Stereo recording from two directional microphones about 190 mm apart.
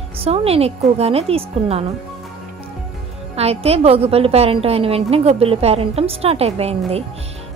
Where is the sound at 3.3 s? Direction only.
30° right (ahead or behind).